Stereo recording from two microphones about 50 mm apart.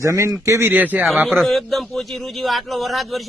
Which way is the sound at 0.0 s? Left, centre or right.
Right.